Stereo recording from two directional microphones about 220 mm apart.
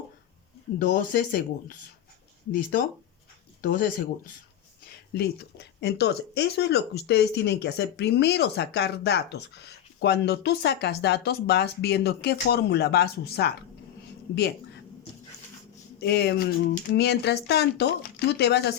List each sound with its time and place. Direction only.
0.8 s speech: 40° left (ahead or behind)
5.1 s speech: 50° left (ahead or behind)
16.0 s speech: 50° left (ahead or behind)